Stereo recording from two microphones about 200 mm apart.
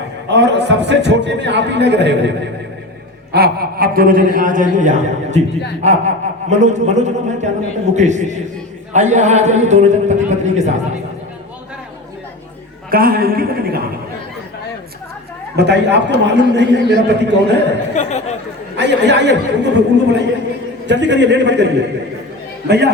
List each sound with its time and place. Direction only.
0.3 s a man's voice: 60° right (ahead or behind); by 10.7 s 35° right (ahead or behind)
12.9 s a man's voice: 45° right (ahead or behind)
15.5 s a man's voice: 60° right (ahead or behind)
17.9 s speech: 35° left (ahead or behind)
18.8 s a man's voice: 60° right (ahead or behind)